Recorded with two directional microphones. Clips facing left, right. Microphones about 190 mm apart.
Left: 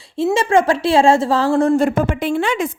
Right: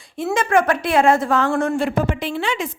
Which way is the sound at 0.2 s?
25° left (ahead or behind).